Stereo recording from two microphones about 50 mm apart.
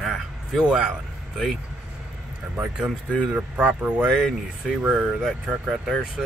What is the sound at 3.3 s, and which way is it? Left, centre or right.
Speech, right.